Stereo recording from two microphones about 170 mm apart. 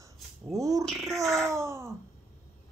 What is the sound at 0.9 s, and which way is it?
Speech, centre (ahead or behind).